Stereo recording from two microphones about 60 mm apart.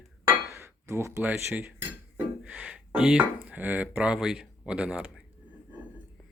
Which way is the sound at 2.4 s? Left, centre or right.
Centre.